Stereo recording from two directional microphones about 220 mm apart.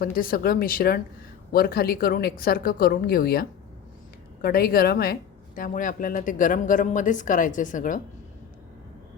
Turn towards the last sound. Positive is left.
turn(degrees=35)  # may be behind; listen again after turning